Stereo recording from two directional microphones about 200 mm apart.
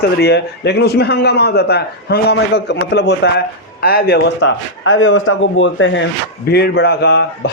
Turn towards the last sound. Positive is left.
turn(degrees=50)  # may be behind; listen again after turning